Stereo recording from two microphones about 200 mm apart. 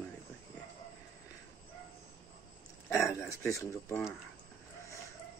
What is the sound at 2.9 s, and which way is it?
Speech, 15° left (ahead or behind).